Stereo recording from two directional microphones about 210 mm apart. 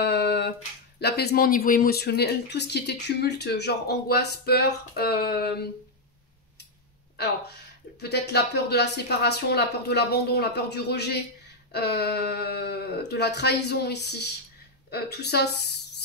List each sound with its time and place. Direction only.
0.0 s finger snapping: 50° left (ahead or behind)
0.9 s speech: 50° left (ahead or behind)
7.2 s speech: 50° left (ahead or behind)